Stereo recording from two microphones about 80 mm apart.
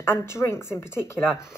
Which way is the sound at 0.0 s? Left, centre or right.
Left.